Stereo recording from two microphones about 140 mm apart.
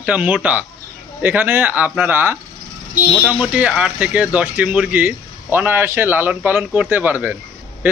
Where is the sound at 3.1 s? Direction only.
Centre (ahead or behind).